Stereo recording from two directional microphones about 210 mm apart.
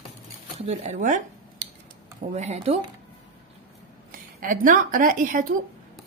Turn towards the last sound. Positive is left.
turn(degrees=-40)  # may be behind; listen again after turning